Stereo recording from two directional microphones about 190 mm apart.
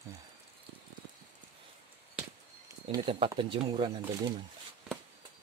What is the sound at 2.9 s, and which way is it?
Speech, 30° right (ahead or behind).